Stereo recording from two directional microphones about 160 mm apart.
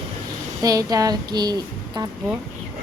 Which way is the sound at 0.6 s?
25° right (ahead or behind).